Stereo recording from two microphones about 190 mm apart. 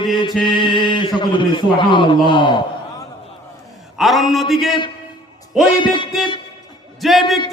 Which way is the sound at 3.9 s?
Centre (ahead or behind).